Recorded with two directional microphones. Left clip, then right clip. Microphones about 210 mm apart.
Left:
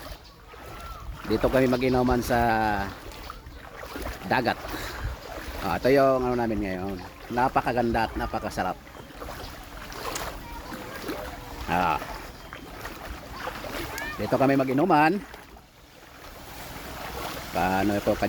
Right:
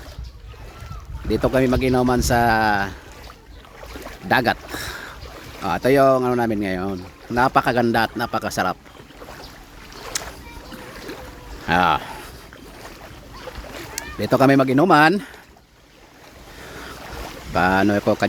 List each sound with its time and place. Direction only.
1.3 s speech: 30° right (ahead or behind)
4.3 s speech: 35° right (ahead or behind)
5.6 s speech: 35° right (ahead or behind)
10.1 s boat: 40° right (ahead or behind)
11.7 s speech: 40° right (ahead or behind)
13.4 s boat: 15° left (ahead or behind)
14.2 s speech: 50° right (ahead or behind)
17.5 s speech: 50° right (ahead or behind)